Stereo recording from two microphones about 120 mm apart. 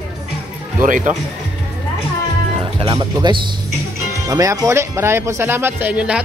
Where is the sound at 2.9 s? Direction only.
35° right (ahead or behind).